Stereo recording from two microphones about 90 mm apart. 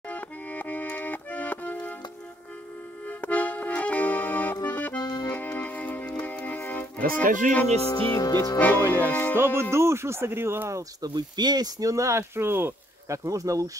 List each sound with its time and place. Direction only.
0.1 s accordion: 20° left (ahead or behind)
3.1 s accordion: 15° left (ahead or behind)
4.9 s accordion: 50° left (ahead or behind)
5.3 s music: 15° left (ahead or behind)
8.1 s music: 35° left (ahead or behind)
8.5 s music: 20° left (ahead or behind)
9.4 s speech: 25° right (ahead or behind)
11.0 s speech: 55° right (ahead or behind)